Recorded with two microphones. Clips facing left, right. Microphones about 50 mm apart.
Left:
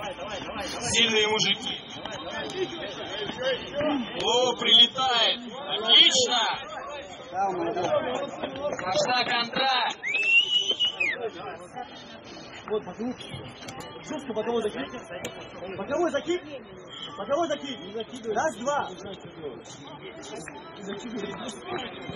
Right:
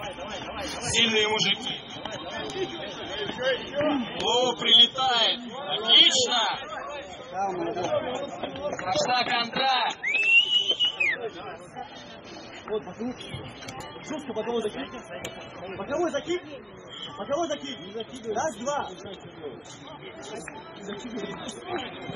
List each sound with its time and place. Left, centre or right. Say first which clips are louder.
0.3 s a man's voice: left 1 dB; centre
6.6 s chatter: right 1 dB; centre
7.4 s a man's voice: left 2 dB; centre
8.0 s speech: left 2 dB; centre
8.3 s a man's voice: left 1 dB; centre
9.8 s a sound: right 2 dB; centre
11.1 s a man's voice: left 1 dB; centre
18.3 s speech: left 2 dB; left
20.9 s a man's voice: left 1 dB; centre
21.7 s a man's voice: right 2 dB; centre